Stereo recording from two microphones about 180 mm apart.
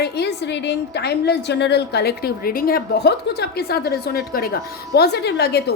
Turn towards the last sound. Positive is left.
turn(degrees=65)  # may be behind; listen again after turning